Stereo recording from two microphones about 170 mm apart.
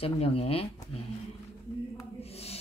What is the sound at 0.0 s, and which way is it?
Speech, 35° left (ahead or behind).